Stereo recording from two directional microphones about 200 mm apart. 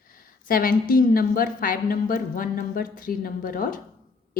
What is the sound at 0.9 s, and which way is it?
Speech, 45° left (ahead or behind).